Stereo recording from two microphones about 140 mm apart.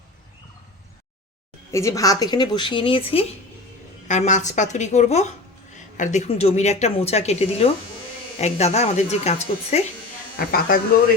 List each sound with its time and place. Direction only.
1.7 s a woman's voice: 20° left (ahead or behind); by 3.0 s 40° left (ahead or behind)
4.1 s a woman's voice: 60° left (ahead or behind)
10.3 s speech: 90° left